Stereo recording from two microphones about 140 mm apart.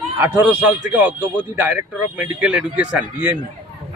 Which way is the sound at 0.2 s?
10° right (ahead or behind).